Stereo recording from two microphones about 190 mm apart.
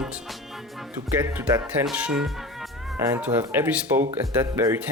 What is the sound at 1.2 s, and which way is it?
Speech, 10° right (ahead or behind).